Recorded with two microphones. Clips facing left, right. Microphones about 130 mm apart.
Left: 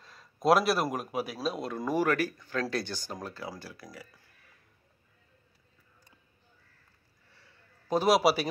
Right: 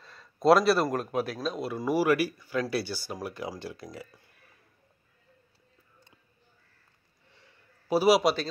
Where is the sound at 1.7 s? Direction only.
10° right (ahead or behind).